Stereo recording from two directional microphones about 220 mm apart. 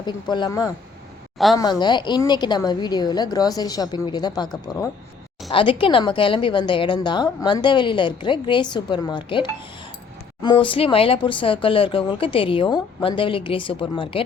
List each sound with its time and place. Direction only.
0.0 s a woman's voice: 20° left (ahead or behind)